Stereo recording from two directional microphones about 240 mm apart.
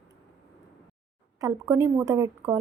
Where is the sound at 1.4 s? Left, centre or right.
Centre.